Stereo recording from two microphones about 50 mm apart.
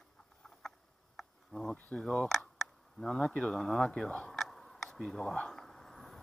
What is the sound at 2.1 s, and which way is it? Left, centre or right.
Speech, centre.